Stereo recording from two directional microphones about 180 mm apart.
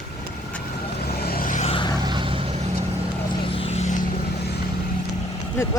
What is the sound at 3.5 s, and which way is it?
Vehicle, 35° left (ahead or behind).